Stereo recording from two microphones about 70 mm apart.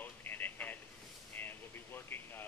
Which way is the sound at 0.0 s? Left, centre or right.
Left.